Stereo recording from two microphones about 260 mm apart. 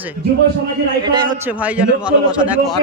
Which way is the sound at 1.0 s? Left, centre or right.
Centre.